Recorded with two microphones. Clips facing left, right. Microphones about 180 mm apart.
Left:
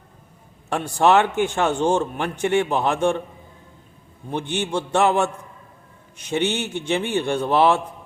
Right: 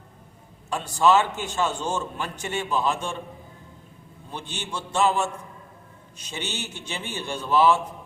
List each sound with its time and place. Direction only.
0.7 s a man's voice: 60° left (ahead or behind)
4.3 s a man's voice: 60° left (ahead or behind)